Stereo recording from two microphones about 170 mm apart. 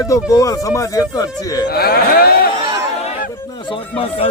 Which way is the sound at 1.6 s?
65° left (ahead or behind).